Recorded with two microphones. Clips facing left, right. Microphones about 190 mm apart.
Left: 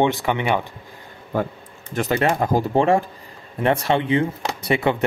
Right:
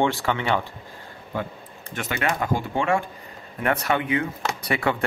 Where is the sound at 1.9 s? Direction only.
35° left (ahead or behind).